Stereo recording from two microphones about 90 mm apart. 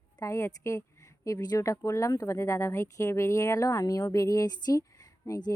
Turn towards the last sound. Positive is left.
turn(degrees=40)  # may be behind; listen again after turning